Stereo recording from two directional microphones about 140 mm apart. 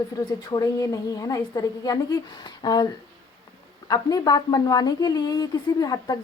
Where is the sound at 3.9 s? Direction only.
30° left (ahead or behind).